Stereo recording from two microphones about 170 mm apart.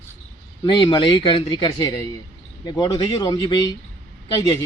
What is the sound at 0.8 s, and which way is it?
Speech, 30° left (ahead or behind).